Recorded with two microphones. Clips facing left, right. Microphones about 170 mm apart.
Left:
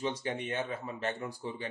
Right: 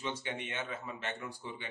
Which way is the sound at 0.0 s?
35° left (ahead or behind).